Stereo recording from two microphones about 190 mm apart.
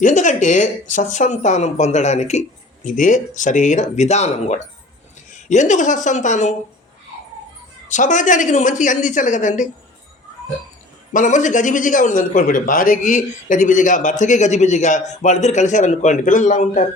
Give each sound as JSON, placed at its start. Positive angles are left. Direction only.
{"t": 0.0, "sound": "speech", "side_deg": 40}
{"t": 7.9, "sound": "speech", "side_deg": 40}
{"t": 11.1, "sound": "speech", "side_deg": 40}